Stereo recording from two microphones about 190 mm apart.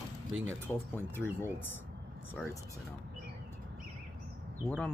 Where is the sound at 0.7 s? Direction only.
10° left (ahead or behind).